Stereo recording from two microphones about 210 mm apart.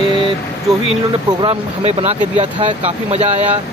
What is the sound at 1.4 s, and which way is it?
Speech, 30° right (ahead or behind).